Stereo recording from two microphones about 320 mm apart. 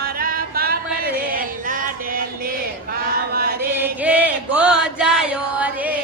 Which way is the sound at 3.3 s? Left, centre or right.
Right.